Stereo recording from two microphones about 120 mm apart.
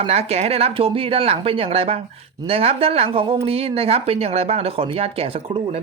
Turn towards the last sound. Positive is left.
turn(degrees=-55)  # may be behind; listen again after turning